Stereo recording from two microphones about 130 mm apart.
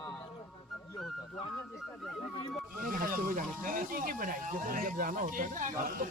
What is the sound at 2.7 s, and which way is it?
Speech, 90° right.